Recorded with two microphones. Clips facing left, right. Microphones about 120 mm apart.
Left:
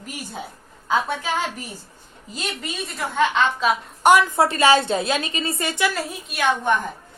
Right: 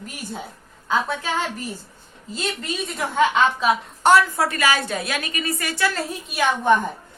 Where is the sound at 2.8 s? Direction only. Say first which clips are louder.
Right 1 dB; 5° right (ahead or behind).